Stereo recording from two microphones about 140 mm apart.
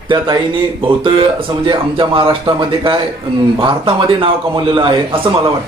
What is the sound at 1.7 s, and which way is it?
A man's voice, 40° right (ahead or behind).